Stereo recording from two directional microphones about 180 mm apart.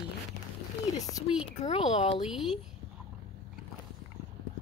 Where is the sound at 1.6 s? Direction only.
35° left (ahead or behind).